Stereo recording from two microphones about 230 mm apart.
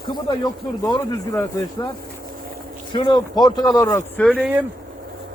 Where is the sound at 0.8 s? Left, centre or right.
Centre.